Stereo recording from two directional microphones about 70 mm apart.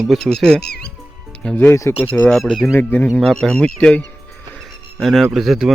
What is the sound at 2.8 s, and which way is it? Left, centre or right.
Speech, left.